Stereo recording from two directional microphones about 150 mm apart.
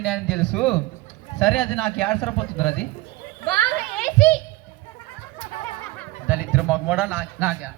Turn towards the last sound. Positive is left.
turn(degrees=-10)  # may be behind; listen again after turning